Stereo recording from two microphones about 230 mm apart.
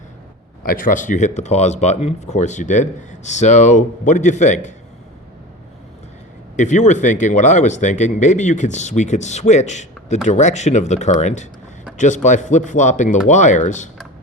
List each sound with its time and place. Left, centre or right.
0.6 s speech: left
6.6 s speech: left